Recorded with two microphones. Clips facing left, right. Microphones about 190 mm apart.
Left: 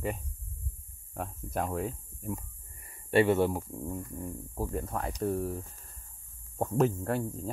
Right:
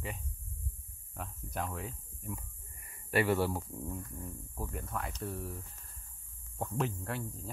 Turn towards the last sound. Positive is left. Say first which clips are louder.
# left 8 dB
turn(degrees=45)  # may be behind; listen again after turning